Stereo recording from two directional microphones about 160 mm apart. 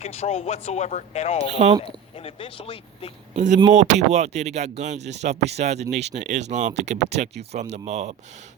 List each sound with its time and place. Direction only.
0.0 s speech: 40° left (ahead or behind)
3.3 s speech: 50° right (ahead or behind)